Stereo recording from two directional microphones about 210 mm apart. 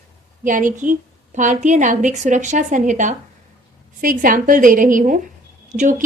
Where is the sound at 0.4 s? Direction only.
40° right (ahead or behind).